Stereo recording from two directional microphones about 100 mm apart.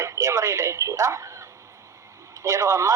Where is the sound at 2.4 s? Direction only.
30° right (ahead or behind).